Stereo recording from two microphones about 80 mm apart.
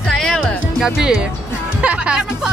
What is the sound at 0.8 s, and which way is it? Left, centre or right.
Speech, centre.